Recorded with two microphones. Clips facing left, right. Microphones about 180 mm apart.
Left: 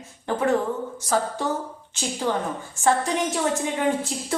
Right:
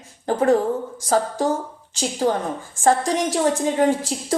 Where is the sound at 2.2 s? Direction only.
40° right (ahead or behind).